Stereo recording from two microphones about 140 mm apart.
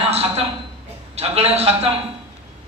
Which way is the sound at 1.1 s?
45° right (ahead or behind).